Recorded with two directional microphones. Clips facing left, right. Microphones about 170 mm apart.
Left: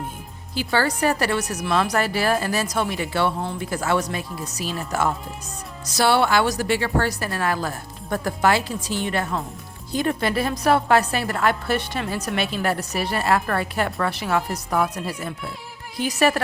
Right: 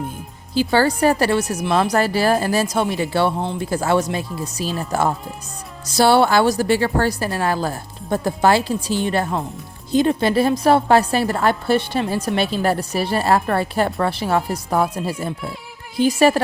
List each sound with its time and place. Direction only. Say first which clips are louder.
0.5 s a woman's voice: right 6 dB; 30° right (ahead or behind)
9.9 s a woman's voice: right 6 dB; 25° right (ahead or behind)